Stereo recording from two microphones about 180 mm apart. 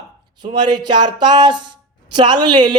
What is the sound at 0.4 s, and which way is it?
A woman's voice, 25° right (ahead or behind).